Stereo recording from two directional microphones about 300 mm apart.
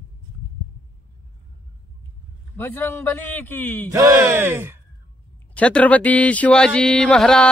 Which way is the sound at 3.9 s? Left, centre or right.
Centre.